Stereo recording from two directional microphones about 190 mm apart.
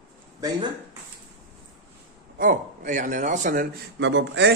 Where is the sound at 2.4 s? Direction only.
45° right (ahead or behind).